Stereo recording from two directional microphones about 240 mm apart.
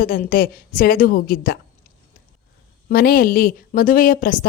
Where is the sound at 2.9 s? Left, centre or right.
Left.